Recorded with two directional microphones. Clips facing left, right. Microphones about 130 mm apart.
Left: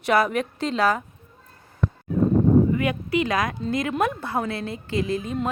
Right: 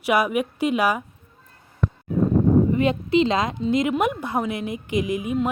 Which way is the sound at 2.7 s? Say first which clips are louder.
Right 3 dB; 25° right (ahead or behind).